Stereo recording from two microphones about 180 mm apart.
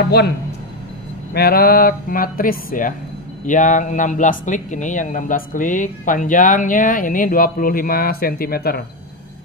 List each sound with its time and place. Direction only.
1.3 s speech: 60° left (ahead or behind)